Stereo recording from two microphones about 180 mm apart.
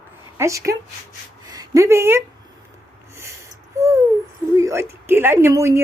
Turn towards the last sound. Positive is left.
turn(degrees=-15)  # may be behind; listen again after turning